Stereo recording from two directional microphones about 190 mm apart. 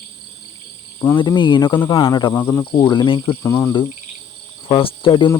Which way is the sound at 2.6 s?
25° left (ahead or behind).